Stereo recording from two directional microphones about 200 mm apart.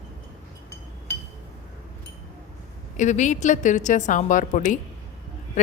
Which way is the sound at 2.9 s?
40° left (ahead or behind).